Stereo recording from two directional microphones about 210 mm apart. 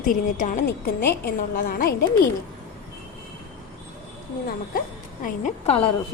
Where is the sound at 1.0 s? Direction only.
50° left (ahead or behind).